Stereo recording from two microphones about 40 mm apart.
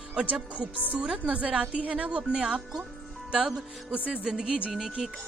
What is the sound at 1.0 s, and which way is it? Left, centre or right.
A woman's voice, right.